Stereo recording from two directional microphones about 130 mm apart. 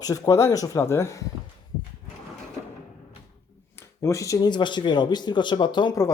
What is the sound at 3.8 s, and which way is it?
Speech, 25° left (ahead or behind).